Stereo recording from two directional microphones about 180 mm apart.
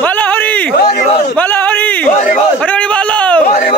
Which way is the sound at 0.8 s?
60° left (ahead or behind).